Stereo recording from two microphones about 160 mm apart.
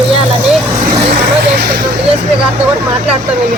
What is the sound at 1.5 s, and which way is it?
Speech, 80° right.